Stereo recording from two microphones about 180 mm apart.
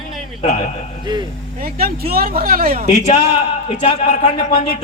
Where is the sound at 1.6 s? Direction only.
55° right (ahead or behind).